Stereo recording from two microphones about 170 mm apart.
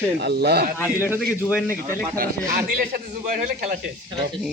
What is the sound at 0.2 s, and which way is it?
Speech, 70° right (ahead or behind).